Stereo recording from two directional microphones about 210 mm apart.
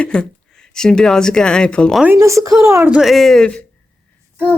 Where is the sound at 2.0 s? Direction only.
10° right (ahead or behind); by 3.6 s 5° left (ahead or behind).